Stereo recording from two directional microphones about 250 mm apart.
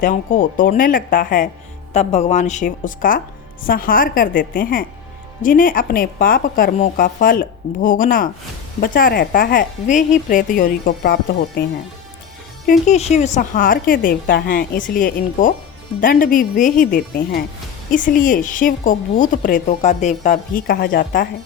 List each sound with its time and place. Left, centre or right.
0.0 s a woman's voice: left
12.9 s a woman's voice: left